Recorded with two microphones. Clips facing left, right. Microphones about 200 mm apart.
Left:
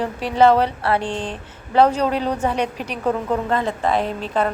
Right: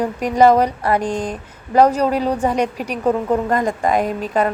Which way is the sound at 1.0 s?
40° right (ahead or behind).